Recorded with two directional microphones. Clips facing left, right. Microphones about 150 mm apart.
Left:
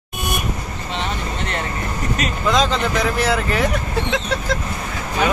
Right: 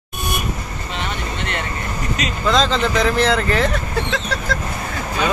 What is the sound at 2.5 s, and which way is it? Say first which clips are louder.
Speech: right 2 dB; 10° left (ahead or behind).